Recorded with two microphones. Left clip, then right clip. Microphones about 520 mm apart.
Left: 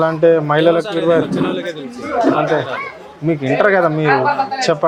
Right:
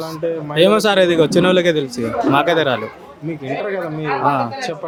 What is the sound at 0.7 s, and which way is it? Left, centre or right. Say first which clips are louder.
Speech: right 1 dB; right.